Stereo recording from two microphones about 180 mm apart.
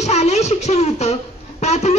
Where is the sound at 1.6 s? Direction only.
35° left (ahead or behind).